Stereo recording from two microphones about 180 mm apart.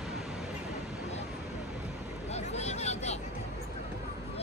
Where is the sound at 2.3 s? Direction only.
35° left (ahead or behind).